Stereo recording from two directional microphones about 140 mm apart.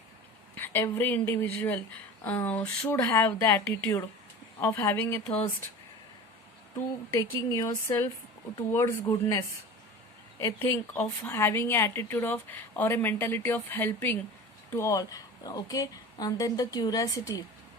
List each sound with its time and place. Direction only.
0.5 s a woman's voice: 15° left (ahead or behind)
7.1 s a woman's voice: 25° left (ahead or behind)
10.9 s a woman's voice: 10° left (ahead or behind); by 17.4 s 25° left (ahead or behind)